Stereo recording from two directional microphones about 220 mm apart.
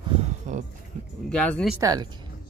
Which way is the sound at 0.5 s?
35° right (ahead or behind).